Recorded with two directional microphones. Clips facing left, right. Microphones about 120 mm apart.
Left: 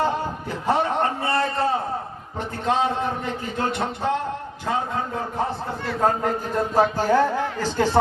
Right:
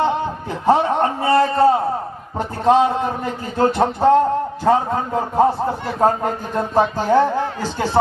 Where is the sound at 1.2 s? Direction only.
35° right (ahead or behind).